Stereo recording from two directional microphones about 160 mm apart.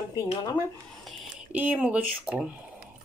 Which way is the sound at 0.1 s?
25° left (ahead or behind).